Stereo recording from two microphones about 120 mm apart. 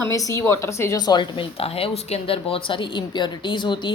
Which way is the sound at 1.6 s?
50° left (ahead or behind).